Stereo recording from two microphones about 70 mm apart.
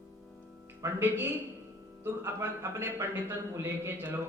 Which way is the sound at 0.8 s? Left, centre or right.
Right.